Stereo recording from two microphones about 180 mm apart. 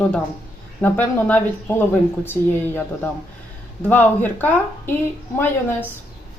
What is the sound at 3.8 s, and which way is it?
Speech, 10° left (ahead or behind).